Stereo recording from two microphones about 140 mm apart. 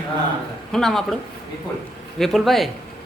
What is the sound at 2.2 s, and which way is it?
Speech, centre (ahead or behind).